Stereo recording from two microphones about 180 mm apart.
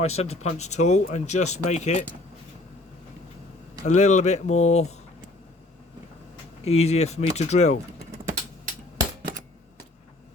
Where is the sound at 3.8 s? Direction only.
40° left (ahead or behind).